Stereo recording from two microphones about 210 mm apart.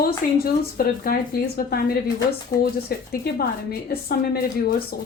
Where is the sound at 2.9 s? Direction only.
45° left (ahead or behind).